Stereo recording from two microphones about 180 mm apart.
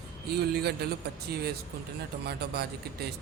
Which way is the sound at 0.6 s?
60° right (ahead or behind).